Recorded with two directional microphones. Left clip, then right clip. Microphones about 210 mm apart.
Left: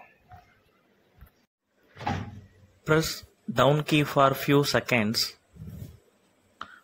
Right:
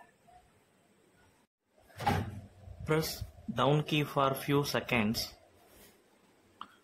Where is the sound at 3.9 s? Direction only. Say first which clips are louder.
Left 8 dB; 20° left (ahead or behind).